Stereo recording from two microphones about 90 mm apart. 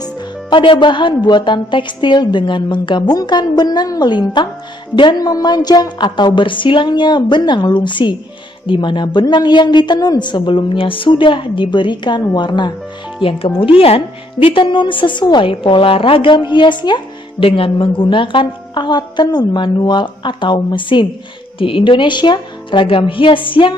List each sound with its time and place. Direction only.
0.0 s a woman's voice: 65° left (ahead or behind)
5.3 s a woman's voice: 50° left (ahead or behind)
13.2 s a woman's voice: 85° left; by 21.1 s 65° left (ahead or behind)
21.5 s a woman's voice: 75° left (ahead or behind)